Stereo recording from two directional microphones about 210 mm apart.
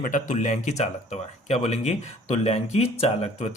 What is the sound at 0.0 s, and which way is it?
Speech, 35° left (ahead or behind).